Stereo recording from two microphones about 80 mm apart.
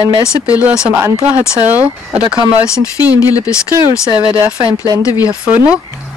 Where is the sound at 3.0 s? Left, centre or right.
Left.